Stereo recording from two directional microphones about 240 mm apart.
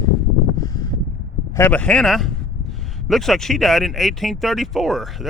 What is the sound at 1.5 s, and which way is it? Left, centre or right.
Speech, centre.